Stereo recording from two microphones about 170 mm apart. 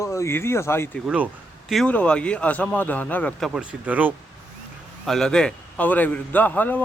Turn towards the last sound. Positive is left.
turn(degrees=10)  # may be behind; listen again after turning